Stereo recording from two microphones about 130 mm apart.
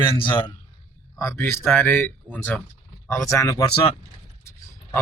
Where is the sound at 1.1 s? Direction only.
20° left (ahead or behind).